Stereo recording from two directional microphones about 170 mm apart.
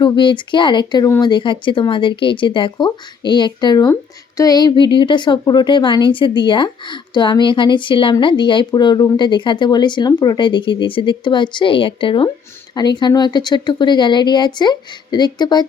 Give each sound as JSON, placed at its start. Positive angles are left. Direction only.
{"t": 0.0, "sound": "speech", "side_deg": 30}